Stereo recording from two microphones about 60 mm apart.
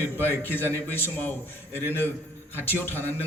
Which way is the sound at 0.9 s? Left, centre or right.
Left.